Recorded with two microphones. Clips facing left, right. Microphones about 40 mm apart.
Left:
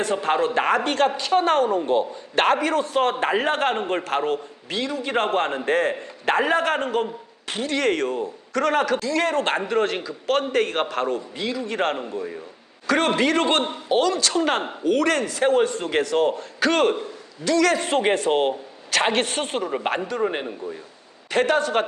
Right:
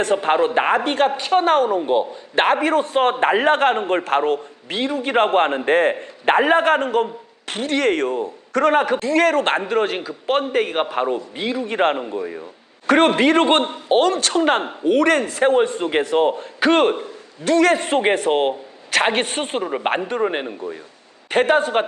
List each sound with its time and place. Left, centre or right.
0.0 s a man's voice: right
0.3 s a man's voice: right
1.8 s a man's voice: centre
2.6 s a man's voice: right; by 11.2 s centre
11.3 s a man's voice: right
12.9 s a man's voice: right